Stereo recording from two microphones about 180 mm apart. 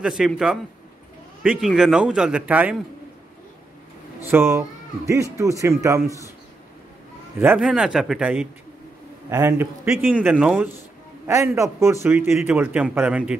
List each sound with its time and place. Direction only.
0.0 s a man's voice: 5° right (ahead or behind)
4.3 s speech: 15° right (ahead or behind)
7.3 s a man's voice: 10° right (ahead or behind)